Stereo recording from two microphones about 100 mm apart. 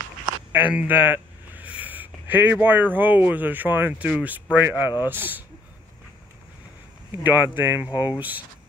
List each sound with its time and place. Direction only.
0.5 s speech: 15° right (ahead or behind)
7.1 s speech: 20° right (ahead or behind)